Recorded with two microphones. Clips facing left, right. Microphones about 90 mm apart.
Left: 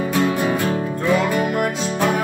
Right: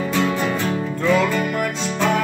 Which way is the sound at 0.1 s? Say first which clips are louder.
Left 2 dB; 15° left (ahead or behind).